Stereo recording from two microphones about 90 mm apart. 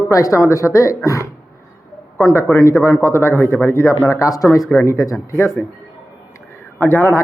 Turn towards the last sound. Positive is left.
turn(degrees=30)  # may be behind; listen again after turning